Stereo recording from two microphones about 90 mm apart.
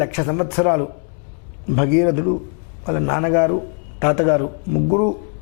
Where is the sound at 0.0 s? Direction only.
15° left (ahead or behind).